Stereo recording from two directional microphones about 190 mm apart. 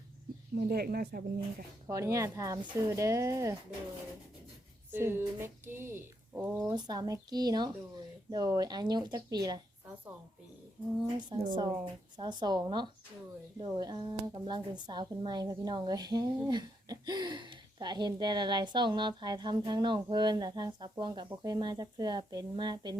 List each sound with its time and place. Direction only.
0.5 s speech: 55° right (ahead or behind)
1.9 s speech: 15° right (ahead or behind)
4.9 s speech: 10° right (ahead or behind)
6.7 s speech: 20° right (ahead or behind)
11.2 s speech: 25° right (ahead or behind)